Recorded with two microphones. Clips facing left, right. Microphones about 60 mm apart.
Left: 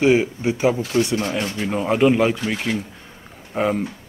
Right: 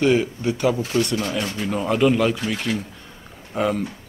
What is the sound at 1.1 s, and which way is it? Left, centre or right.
Speech, left.